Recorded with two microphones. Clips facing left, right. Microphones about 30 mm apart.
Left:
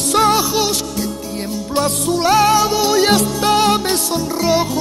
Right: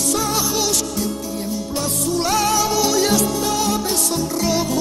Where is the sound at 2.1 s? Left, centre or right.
Left.